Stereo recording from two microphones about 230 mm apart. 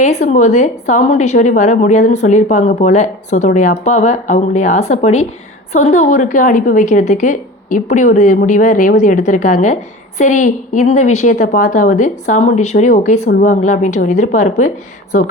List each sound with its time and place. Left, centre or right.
0.0 s a woman's voice: left